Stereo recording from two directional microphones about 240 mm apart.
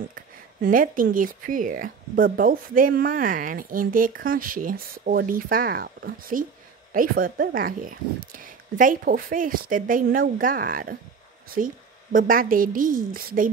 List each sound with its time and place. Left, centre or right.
0.1 s speech: right